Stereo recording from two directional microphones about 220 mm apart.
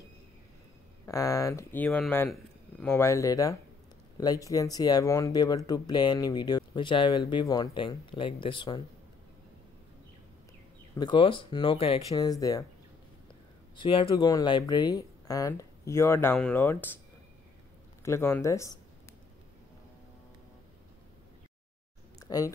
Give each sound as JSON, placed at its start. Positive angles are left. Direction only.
{"t": 1.0, "sound": "speech", "side_deg": 15}
{"t": 11.0, "sound": "speech", "side_deg": 20}
{"t": 13.7, "sound": "speech", "side_deg": 25}
{"t": 18.0, "sound": "speech", "side_deg": 10}